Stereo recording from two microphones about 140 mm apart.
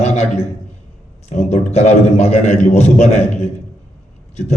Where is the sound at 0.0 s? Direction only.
50° left (ahead or behind).